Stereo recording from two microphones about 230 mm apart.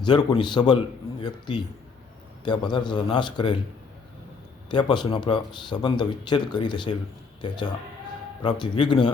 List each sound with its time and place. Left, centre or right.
0.0 s speech: centre
4.7 s speech: centre